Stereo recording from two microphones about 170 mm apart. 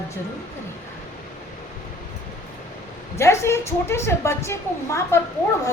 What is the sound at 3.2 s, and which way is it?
A woman's voice, 15° left (ahead or behind).